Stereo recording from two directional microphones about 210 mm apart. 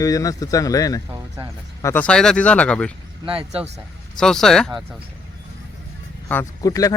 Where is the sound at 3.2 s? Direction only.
25° right (ahead or behind).